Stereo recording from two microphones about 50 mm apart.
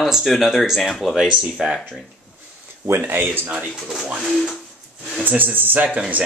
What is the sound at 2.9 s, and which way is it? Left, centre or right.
Speech, right.